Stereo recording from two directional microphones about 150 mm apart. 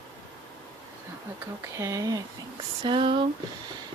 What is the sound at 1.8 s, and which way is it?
Speech, 20° right (ahead or behind).